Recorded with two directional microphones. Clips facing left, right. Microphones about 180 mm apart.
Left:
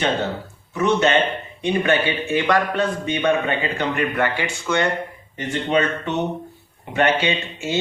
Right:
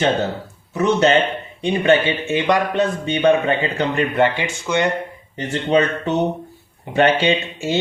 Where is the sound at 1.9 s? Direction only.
20° right (ahead or behind).